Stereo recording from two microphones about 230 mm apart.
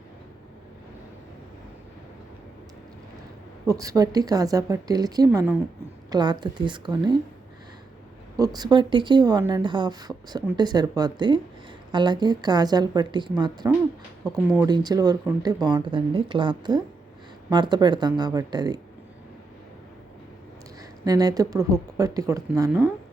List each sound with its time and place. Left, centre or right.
3.7 s speech: centre
8.4 s speech: centre
21.0 s speech: centre